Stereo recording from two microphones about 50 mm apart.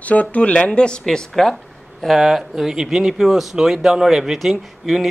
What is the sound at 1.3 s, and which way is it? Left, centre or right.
Speech, centre.